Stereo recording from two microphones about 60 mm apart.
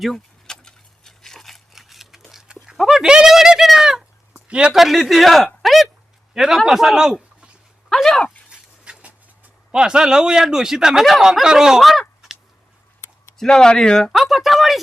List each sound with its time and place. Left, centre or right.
0.0 s a sound: centre
4.8 s speech: centre
5.6 s a sound: centre
6.3 s a man's voice: centre
7.9 s speech: centre
8.4 s a sound: centre
11.0 s speech: centre
13.4 s speech: centre
14.1 s speech: centre